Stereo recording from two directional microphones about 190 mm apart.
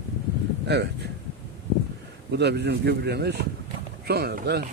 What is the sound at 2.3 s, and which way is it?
Speech, 60° right (ahead or behind).